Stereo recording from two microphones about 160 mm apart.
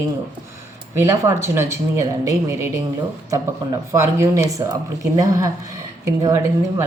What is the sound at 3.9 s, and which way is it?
Speech, 20° right (ahead or behind).